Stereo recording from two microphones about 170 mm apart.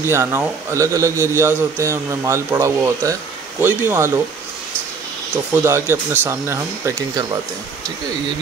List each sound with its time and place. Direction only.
0.0 s a man's voice: 15° right (ahead or behind)
5.3 s a man's voice: 10° right (ahead or behind)